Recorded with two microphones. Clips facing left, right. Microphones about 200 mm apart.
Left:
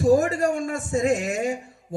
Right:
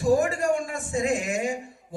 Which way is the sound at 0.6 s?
40° left (ahead or behind).